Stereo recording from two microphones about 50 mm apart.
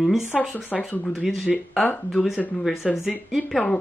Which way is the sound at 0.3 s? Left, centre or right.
Centre.